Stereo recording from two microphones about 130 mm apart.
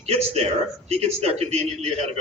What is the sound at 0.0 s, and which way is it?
A man's voice, 50° right (ahead or behind).